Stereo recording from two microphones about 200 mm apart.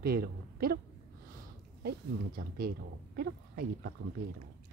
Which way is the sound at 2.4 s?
50° right (ahead or behind).